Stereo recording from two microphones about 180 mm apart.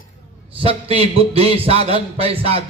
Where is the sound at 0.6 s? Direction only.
30° right (ahead or behind).